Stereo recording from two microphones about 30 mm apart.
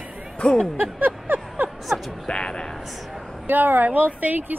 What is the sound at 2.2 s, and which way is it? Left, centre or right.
Speech, left.